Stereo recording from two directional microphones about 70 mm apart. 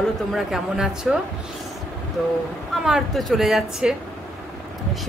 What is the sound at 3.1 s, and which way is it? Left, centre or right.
Speech, centre.